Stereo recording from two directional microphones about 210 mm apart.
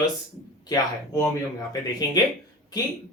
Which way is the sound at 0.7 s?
15° left (ahead or behind).